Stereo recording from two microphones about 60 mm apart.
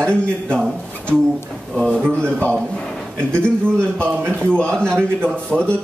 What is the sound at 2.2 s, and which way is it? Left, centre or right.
Speech, centre.